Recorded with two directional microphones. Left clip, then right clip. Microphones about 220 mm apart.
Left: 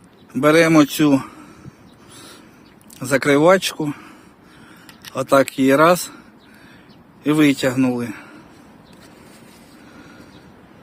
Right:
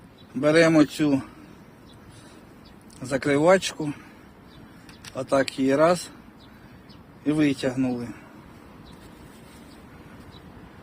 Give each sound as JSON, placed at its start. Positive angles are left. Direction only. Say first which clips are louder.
{"t": 0.3, "sound": "speech", "louder": "left 5 dB", "side_deg": 30}
{"t": 3.0, "sound": "speech", "louder": "left 7 dB", "side_deg": 30}
{"t": 5.1, "sound": "speech", "louder": "left 8 dB", "side_deg": 30}
{"t": 7.3, "sound": "speech", "louder": "left 7 dB", "side_deg": 35}